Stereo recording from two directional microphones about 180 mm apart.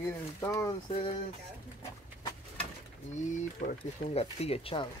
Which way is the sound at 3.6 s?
45° left (ahead or behind).